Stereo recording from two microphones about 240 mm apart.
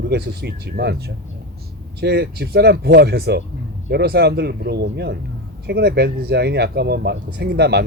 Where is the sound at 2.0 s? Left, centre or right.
Right.